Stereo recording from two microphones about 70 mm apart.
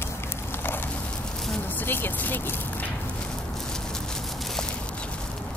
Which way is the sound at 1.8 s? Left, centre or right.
Left.